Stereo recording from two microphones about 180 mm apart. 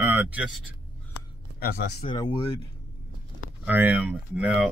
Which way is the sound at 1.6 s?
60° left (ahead or behind).